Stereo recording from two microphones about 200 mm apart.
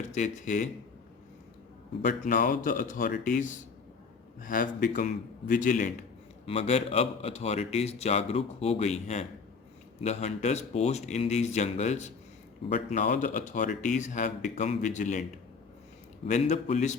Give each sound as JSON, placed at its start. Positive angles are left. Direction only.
{"t": 0.1, "sound": "a man's voice", "side_deg": 35}
{"t": 2.0, "sound": "a man's voice", "side_deg": 45}
{"t": 6.4, "sound": "a man's voice", "side_deg": 30}